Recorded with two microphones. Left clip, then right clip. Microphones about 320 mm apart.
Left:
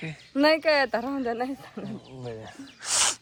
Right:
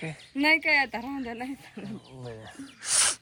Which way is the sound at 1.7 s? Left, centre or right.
Centre.